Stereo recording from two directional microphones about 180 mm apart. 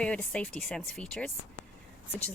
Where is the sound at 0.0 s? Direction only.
5° left (ahead or behind).